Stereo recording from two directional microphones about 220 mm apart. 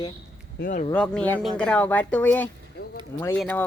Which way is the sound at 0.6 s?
35° left (ahead or behind).